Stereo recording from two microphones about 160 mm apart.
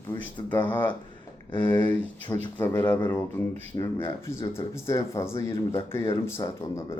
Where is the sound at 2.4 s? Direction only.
15° left (ahead or behind).